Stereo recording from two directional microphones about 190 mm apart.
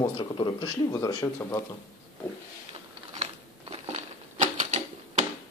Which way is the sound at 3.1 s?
35° right (ahead or behind).